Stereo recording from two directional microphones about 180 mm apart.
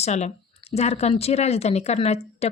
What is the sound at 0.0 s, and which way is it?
Speech, 40° left (ahead or behind).